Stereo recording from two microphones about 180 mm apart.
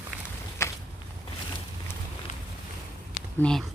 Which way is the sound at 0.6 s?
15° left (ahead or behind).